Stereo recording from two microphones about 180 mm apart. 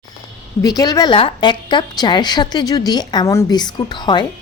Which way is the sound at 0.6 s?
20° left (ahead or behind).